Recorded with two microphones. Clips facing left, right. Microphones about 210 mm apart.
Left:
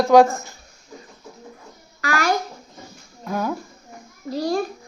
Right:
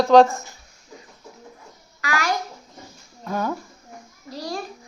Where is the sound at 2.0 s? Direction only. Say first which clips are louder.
Left 3 dB; 55° left (ahead or behind).